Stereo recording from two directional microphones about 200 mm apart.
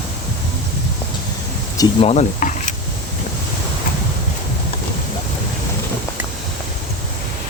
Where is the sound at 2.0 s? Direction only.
35° left (ahead or behind).